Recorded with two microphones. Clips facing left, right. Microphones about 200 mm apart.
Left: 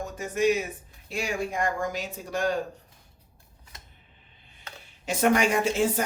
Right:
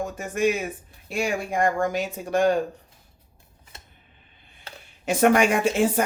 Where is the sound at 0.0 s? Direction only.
55° right (ahead or behind).